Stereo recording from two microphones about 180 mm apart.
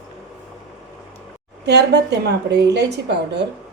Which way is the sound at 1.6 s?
70° right (ahead or behind).